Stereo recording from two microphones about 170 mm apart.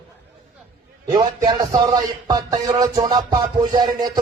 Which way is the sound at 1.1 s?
25° right (ahead or behind).